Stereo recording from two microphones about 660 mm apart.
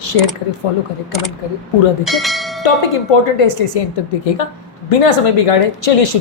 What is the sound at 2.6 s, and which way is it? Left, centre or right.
A woman's voice, left.